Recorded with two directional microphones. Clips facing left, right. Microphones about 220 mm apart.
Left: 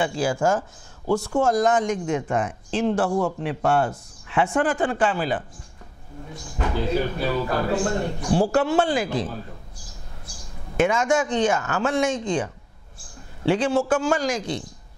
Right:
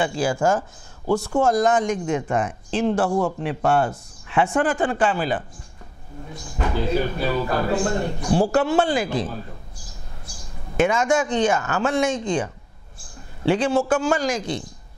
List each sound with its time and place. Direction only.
0.0 s speech: 10° right (ahead or behind)
3.1 s a man's voice: 35° right (ahead or behind)
3.3 s speech: 10° right (ahead or behind)
6.6 s a man's voice: 15° right (ahead or behind)
8.3 s speech: 10° right (ahead or behind)
10.3 s a sound: 5° right (ahead or behind)
10.8 s speech: 10° right (ahead or behind)
13.5 s speech: 10° right (ahead or behind)